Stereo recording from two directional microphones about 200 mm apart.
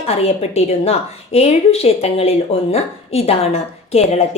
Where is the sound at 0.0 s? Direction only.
30° left (ahead or behind).